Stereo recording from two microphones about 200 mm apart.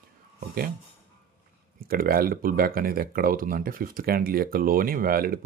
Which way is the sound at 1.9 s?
45° right (ahead or behind).